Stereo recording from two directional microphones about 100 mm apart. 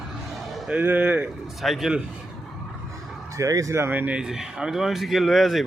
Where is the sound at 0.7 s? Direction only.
15° right (ahead or behind).